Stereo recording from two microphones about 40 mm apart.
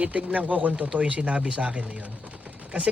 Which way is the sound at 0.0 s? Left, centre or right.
Right.